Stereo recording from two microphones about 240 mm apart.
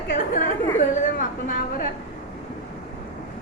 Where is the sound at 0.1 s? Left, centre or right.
Left.